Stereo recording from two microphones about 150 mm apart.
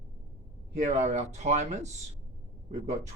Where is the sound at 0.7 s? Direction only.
50° right (ahead or behind).